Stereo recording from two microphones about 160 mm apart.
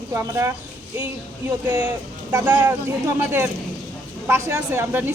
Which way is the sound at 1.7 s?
10° right (ahead or behind).